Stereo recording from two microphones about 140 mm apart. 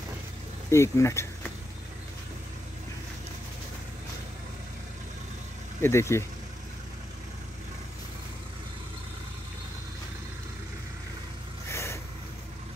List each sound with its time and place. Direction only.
0.7 s speech: 20° left (ahead or behind)
5.8 s speech: 20° left (ahead or behind)
11.7 s vehicle: 20° left (ahead or behind)